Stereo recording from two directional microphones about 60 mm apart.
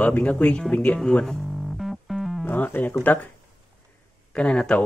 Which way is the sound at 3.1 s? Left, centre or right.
Left.